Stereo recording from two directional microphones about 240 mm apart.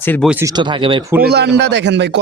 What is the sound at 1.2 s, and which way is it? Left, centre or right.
Speech, right.